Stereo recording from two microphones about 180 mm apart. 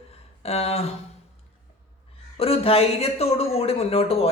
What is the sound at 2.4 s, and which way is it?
Speech, 35° left (ahead or behind).